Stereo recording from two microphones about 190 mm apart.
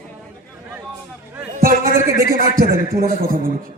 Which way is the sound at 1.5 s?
45° right (ahead or behind).